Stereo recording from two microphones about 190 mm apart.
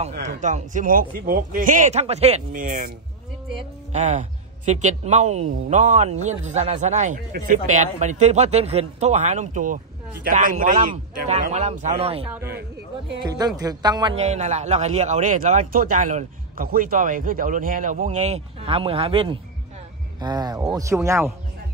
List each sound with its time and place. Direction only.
0.2 s speech: 40° right (ahead or behind)
2.5 s speech: 45° right (ahead or behind)
3.9 s speech: 40° right (ahead or behind)
13.4 s a woman's voice: 20° right (ahead or behind)
14.1 s a woman's voice: 35° right (ahead or behind); by 21.3 s 15° right (ahead or behind)